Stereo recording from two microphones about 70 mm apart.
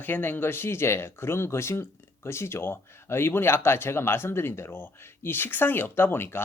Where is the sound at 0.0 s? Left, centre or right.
Left.